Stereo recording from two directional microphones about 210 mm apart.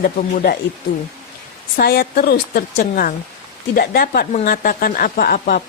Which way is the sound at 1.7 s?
50° left (ahead or behind).